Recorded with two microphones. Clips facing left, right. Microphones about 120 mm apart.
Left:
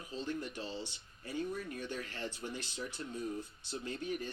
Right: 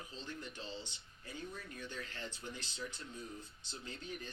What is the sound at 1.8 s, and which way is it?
Speech, 65° left (ahead or behind).